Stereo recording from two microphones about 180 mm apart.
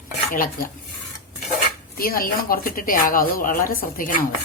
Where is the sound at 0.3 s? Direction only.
50° left (ahead or behind).